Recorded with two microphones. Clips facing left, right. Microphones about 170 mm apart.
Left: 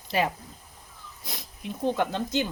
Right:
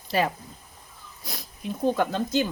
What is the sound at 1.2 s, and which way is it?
Sniff, 20° left (ahead or behind).